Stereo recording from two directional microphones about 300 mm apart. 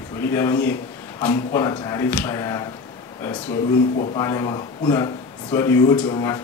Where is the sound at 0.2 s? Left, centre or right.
Centre.